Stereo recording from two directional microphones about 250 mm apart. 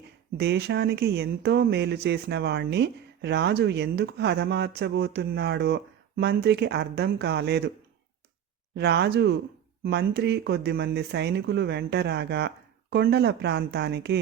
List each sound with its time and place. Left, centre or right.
0.3 s speech: right
8.7 s speech: right